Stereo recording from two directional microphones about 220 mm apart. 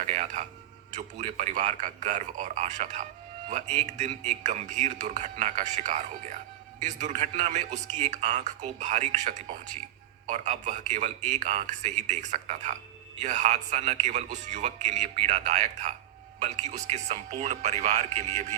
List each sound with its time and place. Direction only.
0.1 s a man's voice: 30° right (ahead or behind)